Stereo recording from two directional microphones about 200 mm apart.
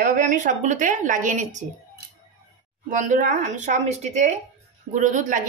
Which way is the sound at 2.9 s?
40° right (ahead or behind).